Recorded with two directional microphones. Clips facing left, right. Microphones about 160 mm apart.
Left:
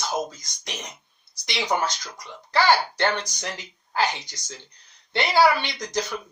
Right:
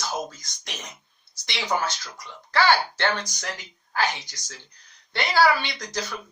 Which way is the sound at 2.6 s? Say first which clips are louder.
Left 1 dB; 20° left (ahead or behind).